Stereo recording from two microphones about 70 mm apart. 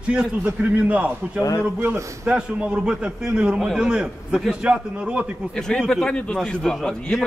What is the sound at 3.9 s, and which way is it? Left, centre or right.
A man's voice, centre.